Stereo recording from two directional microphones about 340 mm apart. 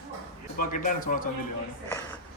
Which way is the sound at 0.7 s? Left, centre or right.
Left.